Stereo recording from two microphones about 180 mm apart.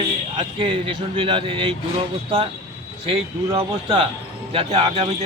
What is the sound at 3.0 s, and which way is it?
Speech, 30° right (ahead or behind).